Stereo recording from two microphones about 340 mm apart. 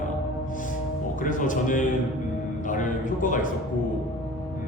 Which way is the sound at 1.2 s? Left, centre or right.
Left.